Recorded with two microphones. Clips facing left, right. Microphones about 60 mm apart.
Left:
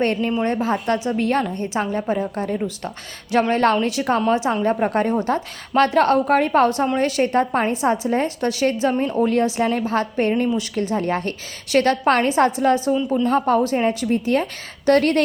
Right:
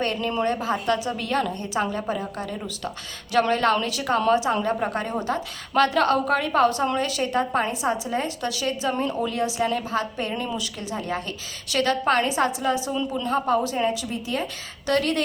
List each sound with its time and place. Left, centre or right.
0.0 s a woman's voice: left